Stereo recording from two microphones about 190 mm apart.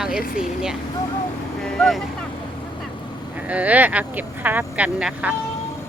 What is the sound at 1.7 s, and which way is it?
Vehicle, centre (ahead or behind).